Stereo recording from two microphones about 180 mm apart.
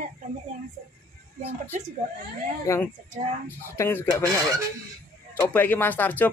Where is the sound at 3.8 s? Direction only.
10° left (ahead or behind).